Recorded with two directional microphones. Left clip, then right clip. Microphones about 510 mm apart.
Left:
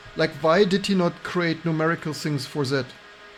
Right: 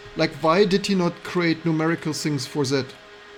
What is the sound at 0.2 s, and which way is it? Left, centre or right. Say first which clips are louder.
Speech: even; centre.